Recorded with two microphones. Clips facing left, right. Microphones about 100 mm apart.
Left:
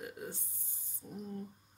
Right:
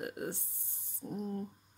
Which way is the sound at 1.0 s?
50° right (ahead or behind).